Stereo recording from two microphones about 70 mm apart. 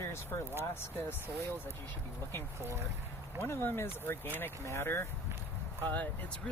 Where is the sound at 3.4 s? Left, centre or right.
Left.